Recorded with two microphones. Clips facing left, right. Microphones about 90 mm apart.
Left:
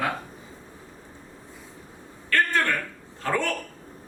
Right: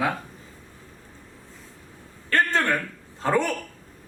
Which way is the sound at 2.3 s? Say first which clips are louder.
Right 1 dB; 25° right (ahead or behind).